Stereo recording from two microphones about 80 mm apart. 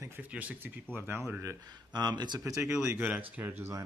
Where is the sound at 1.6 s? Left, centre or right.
Right.